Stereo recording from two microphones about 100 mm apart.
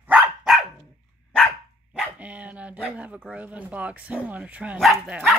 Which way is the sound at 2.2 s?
15° right (ahead or behind).